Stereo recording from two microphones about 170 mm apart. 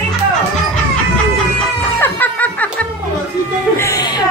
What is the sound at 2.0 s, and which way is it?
Snicker, 10° left (ahead or behind).